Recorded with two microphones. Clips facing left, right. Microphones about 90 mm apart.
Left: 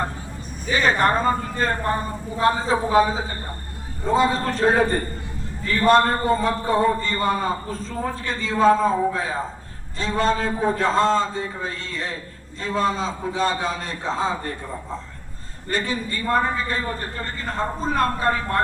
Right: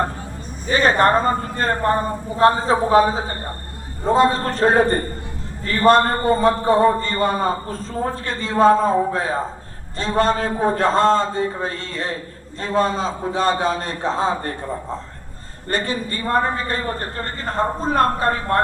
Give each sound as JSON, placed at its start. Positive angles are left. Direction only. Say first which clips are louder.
{"t": 0.7, "sound": "a man's voice", "louder": "right 4 dB", "side_deg": -50}
{"t": 15.7, "sound": "a man's voice", "louder": "right 2 dB", "side_deg": -50}